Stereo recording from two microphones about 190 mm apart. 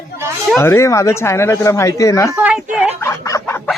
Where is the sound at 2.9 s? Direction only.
15° left (ahead or behind).